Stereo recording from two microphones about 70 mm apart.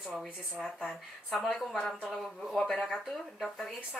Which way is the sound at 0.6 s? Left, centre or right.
Centre.